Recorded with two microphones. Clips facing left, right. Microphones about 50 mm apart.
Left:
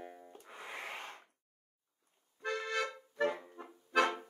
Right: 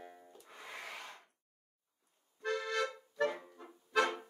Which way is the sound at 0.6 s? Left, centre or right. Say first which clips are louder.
Left 3 dB; left.